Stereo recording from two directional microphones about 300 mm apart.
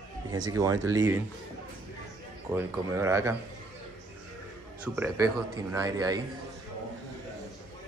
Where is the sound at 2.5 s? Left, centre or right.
Centre.